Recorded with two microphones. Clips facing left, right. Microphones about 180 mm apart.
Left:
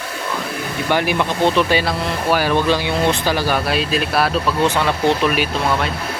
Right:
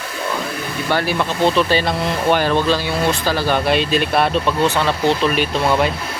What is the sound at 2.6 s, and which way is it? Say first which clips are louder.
Speech: left 1 dB; 15° left (ahead or behind).